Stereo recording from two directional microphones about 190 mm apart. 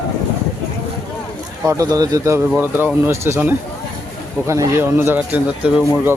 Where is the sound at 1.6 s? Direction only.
20° right (ahead or behind).